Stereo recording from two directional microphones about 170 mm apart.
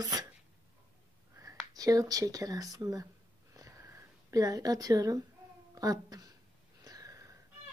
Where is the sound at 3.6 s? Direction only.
20° right (ahead or behind).